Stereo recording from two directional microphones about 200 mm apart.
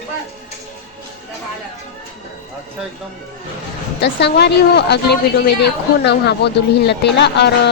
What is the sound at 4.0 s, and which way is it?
A woman's voice, 60° left (ahead or behind).